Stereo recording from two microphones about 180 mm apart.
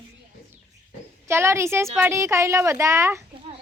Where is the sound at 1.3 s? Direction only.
15° right (ahead or behind).